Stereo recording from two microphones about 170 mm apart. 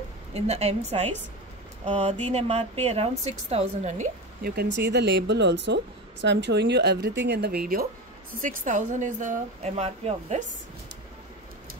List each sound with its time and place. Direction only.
0.3 s speech: 40° right (ahead or behind)
4.4 s a woman's voice: 65° right (ahead or behind)
8.4 s speech: 50° right (ahead or behind)